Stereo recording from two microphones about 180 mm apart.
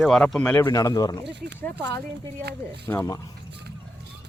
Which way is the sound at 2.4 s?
65° right (ahead or behind).